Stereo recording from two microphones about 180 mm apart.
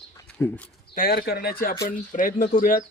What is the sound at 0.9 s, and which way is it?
Speech, 55° left (ahead or behind).